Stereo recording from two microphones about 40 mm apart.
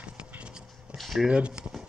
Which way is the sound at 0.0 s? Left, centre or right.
Right.